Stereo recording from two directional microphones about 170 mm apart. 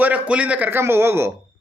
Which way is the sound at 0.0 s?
10° right (ahead or behind).